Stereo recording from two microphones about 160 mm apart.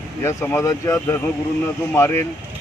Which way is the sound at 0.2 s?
15° left (ahead or behind).